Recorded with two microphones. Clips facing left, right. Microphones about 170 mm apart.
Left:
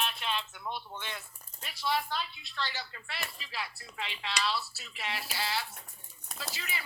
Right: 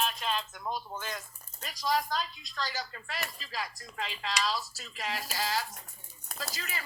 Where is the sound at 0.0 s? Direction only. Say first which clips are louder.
Right 3 dB; 40° right (ahead or behind).